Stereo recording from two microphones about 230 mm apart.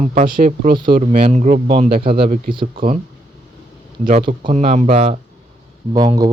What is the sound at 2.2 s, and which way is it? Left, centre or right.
Speech, right.